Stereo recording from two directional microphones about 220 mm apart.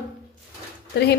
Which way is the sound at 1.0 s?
50° left (ahead or behind).